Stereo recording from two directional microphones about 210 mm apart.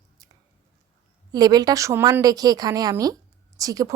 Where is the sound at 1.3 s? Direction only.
20° right (ahead or behind).